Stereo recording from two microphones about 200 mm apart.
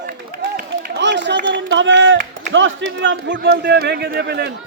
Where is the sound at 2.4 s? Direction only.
70° right (ahead or behind).